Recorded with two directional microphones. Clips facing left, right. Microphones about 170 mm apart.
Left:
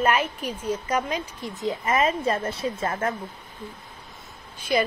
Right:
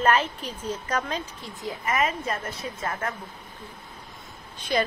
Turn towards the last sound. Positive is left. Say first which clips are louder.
# left 2 dB
turn(degrees=10)  # may be behind; listen again after turning